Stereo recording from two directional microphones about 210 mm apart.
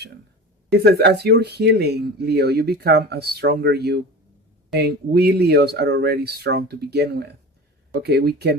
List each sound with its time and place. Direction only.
0.7 s speech: 50° right (ahead or behind)